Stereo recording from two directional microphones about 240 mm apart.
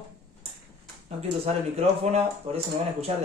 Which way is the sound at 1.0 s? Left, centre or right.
Right.